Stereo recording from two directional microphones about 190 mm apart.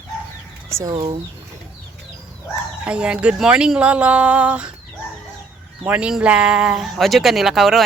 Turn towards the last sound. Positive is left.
turn(degrees=0)  # may be behind; listen again after turning